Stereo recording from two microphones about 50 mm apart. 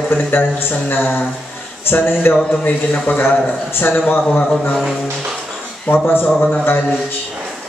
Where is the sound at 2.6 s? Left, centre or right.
Left.